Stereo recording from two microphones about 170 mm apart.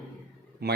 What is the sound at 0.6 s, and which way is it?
Speech, 70° right (ahead or behind).